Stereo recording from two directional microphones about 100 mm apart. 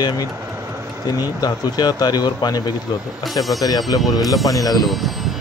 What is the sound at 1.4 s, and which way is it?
Speech, 45° left (ahead or behind).